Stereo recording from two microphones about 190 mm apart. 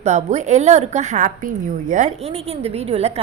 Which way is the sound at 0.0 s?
35° right (ahead or behind).